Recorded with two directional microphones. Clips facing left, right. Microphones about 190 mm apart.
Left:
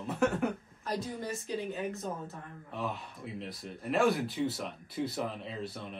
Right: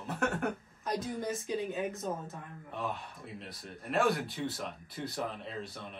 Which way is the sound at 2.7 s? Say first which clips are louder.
Left 1 dB; centre (ahead or behind).